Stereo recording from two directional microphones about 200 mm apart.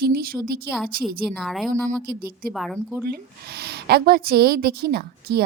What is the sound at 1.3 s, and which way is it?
Speech, centre (ahead or behind).